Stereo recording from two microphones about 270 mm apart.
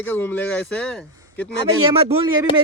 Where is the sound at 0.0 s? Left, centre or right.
Centre.